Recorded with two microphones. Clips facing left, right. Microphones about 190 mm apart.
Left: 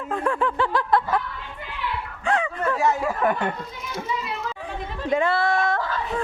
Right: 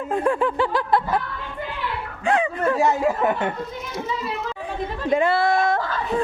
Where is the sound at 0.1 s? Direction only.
20° right (ahead or behind).